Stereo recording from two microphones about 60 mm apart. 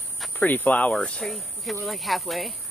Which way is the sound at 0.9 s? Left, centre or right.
Centre.